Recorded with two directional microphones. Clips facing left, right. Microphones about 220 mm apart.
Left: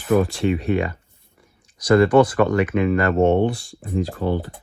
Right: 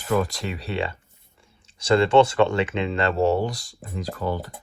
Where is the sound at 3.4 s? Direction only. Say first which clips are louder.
Left 7 dB; 40° right (ahead or behind).